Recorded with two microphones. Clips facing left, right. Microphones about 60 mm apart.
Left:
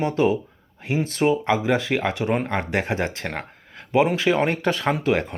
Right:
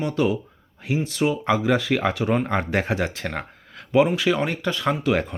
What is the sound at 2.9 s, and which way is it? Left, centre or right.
Speech, left.